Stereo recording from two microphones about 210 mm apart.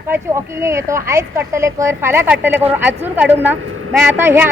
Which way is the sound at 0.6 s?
15° right (ahead or behind).